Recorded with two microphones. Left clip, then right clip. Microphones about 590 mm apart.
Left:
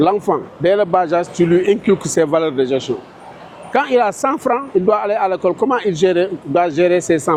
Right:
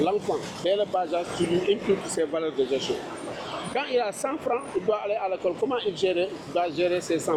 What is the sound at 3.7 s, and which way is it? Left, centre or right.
Speech, left.